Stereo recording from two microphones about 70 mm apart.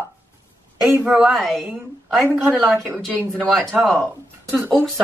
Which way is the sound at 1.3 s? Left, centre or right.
Centre.